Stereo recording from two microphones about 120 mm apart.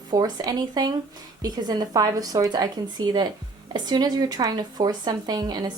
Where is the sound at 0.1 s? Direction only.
35° right (ahead or behind).